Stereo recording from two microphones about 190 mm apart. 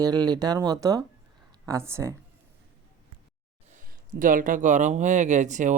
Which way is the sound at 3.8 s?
45° right (ahead or behind).